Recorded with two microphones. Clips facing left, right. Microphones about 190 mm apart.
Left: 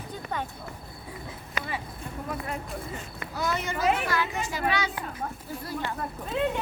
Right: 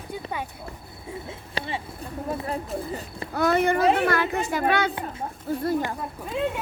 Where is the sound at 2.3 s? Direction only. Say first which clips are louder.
Right 5 dB; 35° right (ahead or behind).